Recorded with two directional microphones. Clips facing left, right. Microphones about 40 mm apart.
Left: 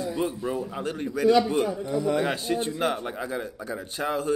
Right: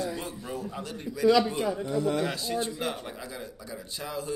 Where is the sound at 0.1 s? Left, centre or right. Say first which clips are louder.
Left 8 dB; centre.